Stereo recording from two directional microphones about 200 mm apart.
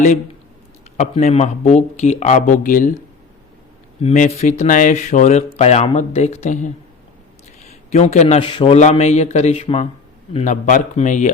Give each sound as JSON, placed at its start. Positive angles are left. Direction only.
{"t": 0.9, "sound": "speech", "side_deg": 30}
{"t": 4.0, "sound": "speech", "side_deg": 35}
{"t": 7.9, "sound": "speech", "side_deg": 35}